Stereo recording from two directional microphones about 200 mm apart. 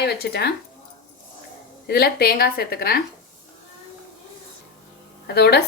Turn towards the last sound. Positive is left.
turn(degrees=55)  # may be behind; listen again after turning